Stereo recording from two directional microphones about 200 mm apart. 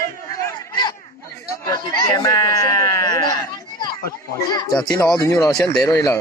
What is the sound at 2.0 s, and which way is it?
Speech, 20° left (ahead or behind).